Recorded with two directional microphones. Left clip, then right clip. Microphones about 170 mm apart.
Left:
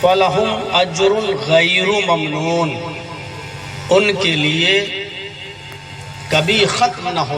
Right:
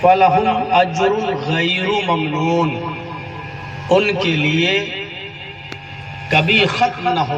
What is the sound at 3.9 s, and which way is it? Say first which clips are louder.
Speech: left 2 dB; 20° right (ahead or behind).